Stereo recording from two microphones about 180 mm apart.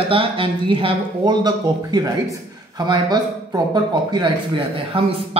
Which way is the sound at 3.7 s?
25° right (ahead or behind).